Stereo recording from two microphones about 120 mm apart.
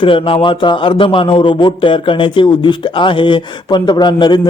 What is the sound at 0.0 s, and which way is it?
A man's voice, 45° left (ahead or behind).